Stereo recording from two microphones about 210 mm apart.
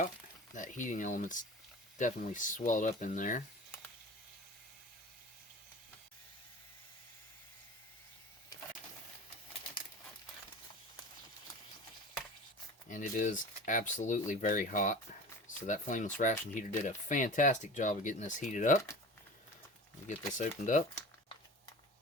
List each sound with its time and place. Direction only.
0.5 s speech: 40° left (ahead or behind)
12.9 s speech: 35° left (ahead or behind)
20.1 s speech: 35° left (ahead or behind)